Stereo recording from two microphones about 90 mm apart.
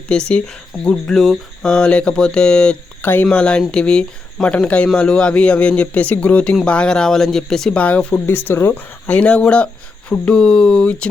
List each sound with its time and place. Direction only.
0.3 s speech: 10° left (ahead or behind)
3.0 s speech: 20° left (ahead or behind)
3.2 s speech: 10° left (ahead or behind)
7.8 s speech: 15° left (ahead or behind)
9.1 s speech: 15° left (ahead or behind)